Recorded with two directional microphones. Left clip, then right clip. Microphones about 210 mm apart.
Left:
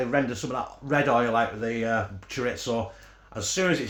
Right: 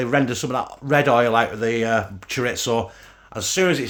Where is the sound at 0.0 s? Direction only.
60° right (ahead or behind).